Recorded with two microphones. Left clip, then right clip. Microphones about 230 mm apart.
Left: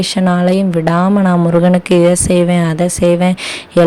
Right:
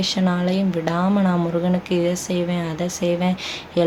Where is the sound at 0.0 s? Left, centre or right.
Left.